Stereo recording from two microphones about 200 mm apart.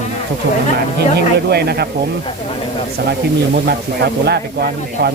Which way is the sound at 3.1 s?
55° right (ahead or behind).